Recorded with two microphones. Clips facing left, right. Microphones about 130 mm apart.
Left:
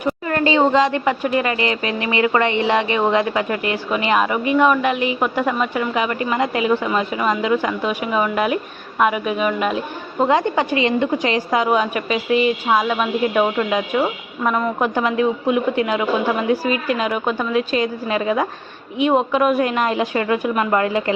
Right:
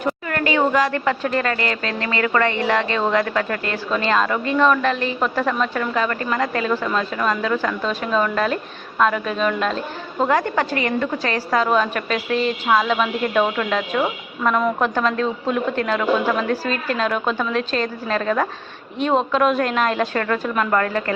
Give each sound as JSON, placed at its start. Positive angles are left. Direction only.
{"t": 0.3, "sound": "a woman's voice", "side_deg": 25}